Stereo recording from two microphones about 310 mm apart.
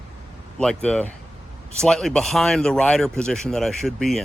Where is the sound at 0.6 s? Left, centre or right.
Centre.